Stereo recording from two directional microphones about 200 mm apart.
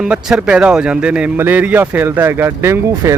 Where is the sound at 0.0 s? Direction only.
5° right (ahead or behind).